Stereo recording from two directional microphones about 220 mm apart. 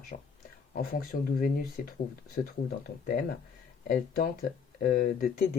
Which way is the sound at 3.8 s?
40° left (ahead or behind).